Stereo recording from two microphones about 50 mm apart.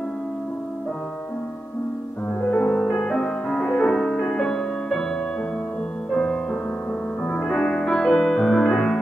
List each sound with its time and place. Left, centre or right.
2.4 s music: centre
6.1 s music: centre